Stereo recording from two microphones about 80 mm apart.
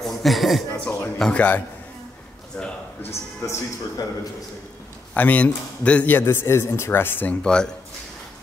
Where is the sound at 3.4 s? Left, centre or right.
Left.